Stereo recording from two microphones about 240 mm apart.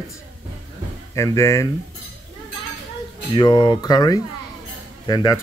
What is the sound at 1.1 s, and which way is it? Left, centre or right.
Speech, centre.